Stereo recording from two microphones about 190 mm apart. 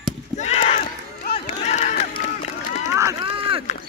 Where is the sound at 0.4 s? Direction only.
35° left (ahead or behind).